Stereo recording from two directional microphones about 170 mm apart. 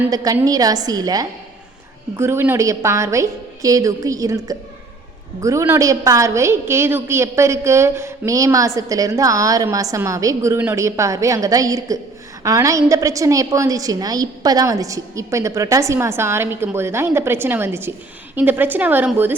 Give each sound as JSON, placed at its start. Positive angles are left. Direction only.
{"t": 0.1, "sound": "a woman's voice", "side_deg": -20}